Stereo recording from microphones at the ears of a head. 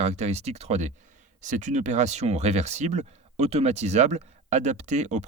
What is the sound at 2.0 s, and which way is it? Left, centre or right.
Speech, right.